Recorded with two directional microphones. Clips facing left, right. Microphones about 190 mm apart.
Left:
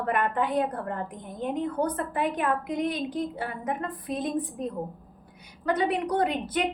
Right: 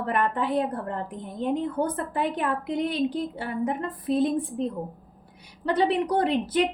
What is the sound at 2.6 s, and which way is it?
A woman's voice, 30° right (ahead or behind).